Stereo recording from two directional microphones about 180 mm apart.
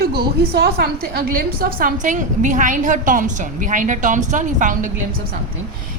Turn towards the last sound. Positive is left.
turn(degrees=-45)  # may be behind; listen again after turning